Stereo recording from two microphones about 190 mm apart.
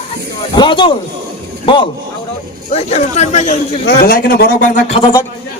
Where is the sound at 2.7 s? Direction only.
35° left (ahead or behind).